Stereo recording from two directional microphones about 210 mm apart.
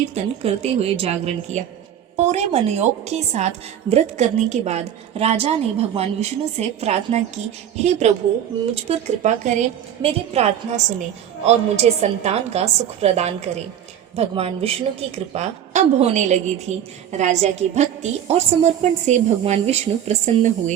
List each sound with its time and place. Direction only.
0.1 s a woman's voice: 30° right (ahead or behind)